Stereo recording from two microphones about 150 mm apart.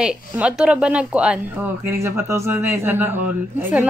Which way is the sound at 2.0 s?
20° right (ahead or behind).